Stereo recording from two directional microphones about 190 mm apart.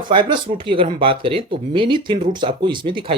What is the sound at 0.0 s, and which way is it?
Speech, 25° right (ahead or behind).